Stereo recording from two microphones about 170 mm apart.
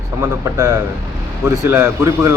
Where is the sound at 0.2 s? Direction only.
20° right (ahead or behind).